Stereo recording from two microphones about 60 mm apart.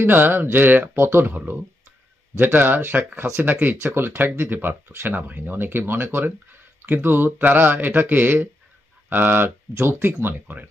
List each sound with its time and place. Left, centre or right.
0.0 s speech: right
1.3 s speech: right